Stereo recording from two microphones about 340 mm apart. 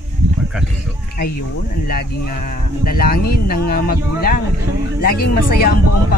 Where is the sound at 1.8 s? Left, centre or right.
Left.